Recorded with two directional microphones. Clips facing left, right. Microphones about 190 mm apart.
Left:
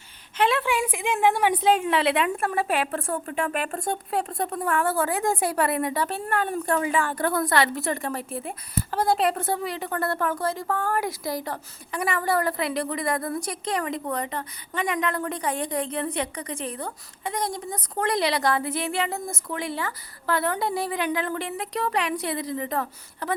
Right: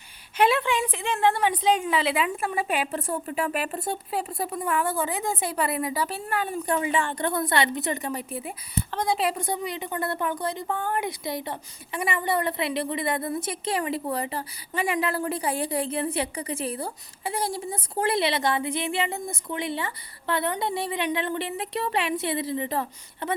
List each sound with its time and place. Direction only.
0.3 s a sound: 10° right (ahead or behind)
0.6 s a woman's voice: 10° left (ahead or behind)
14.1 s speech: 30° right (ahead or behind)
14.7 s a woman's voice: 5° right (ahead or behind)